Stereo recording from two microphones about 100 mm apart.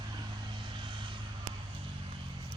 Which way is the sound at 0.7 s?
55° right (ahead or behind).